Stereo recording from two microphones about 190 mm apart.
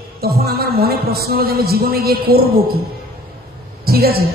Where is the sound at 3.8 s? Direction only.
55° right (ahead or behind).